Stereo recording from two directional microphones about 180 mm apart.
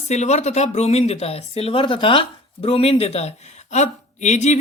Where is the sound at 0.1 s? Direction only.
40° left (ahead or behind).